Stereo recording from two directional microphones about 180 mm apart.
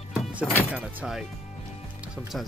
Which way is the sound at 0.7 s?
5° right (ahead or behind).